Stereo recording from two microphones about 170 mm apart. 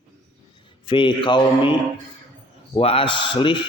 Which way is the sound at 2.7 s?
30° left (ahead or behind).